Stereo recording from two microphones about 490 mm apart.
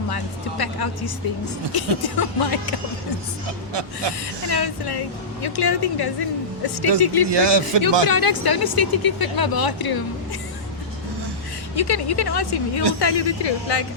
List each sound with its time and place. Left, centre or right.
0.1 s speech: left
4.4 s speech: left
7.3 s a man's voice: right
8.1 s speech: left
11.8 s speech: left